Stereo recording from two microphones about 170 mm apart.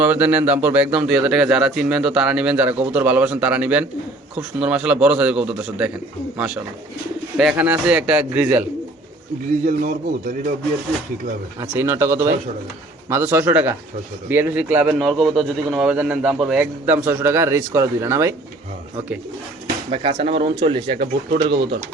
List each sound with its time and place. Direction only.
0.0 s a man's voice: 10° right (ahead or behind)
9.6 s a man's voice: 50° right (ahead or behind)
11.6 s a man's voice: 10° right (ahead or behind)
19.9 s speech: 30° right (ahead or behind)
21.0 s speech: 65° right (ahead or behind)